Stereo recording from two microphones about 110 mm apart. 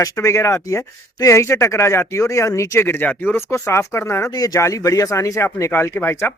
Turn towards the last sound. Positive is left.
turn(degrees=20)  # may be behind; listen again after turning